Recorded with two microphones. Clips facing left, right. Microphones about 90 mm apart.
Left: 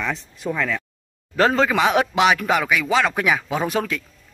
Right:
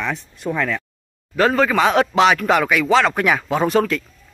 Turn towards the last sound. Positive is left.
turn(degrees=5)  # may be behind; listen again after turning